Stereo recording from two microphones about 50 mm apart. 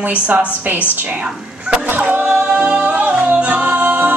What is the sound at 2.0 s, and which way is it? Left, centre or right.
Music, right.